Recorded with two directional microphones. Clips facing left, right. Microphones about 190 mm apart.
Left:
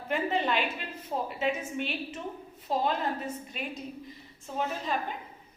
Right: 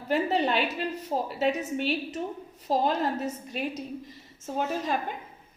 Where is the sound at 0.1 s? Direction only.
35° right (ahead or behind).